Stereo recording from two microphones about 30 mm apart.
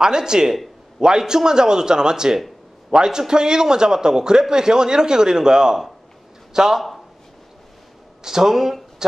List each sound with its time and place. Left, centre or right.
0.0 s a man's voice: right
8.2 s speech: centre